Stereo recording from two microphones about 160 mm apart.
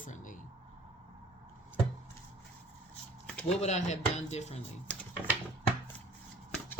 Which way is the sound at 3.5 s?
45° left (ahead or behind).